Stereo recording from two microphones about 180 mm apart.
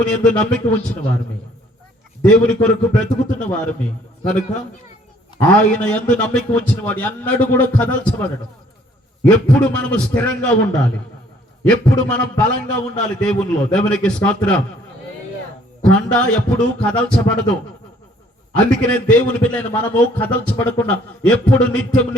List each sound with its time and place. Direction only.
0.3 s a man's voice: 5° left (ahead or behind)
2.2 s a man's voice: 5° left (ahead or behind)
5.4 s a man's voice: 5° left (ahead or behind)
15.8 s a man's voice: 5° left (ahead or behind)